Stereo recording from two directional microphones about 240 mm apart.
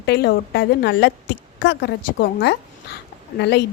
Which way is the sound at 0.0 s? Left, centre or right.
Left.